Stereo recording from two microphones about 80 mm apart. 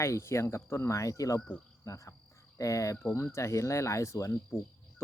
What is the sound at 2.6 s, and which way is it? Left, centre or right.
Speech, left.